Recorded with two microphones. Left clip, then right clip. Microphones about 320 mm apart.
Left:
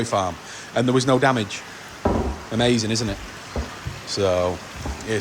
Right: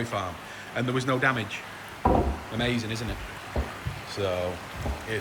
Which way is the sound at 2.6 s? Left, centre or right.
Centre.